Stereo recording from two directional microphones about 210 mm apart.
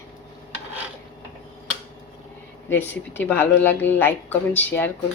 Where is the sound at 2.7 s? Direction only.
10° left (ahead or behind).